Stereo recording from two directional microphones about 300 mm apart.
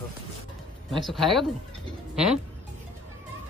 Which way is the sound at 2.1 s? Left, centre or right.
Centre.